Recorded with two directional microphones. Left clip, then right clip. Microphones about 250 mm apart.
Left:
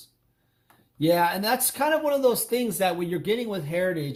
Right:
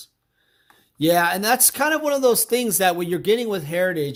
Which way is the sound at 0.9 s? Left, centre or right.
Right.